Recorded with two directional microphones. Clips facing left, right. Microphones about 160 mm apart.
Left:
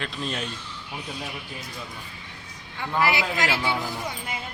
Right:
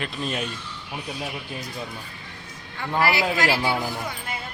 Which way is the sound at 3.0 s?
20° left (ahead or behind).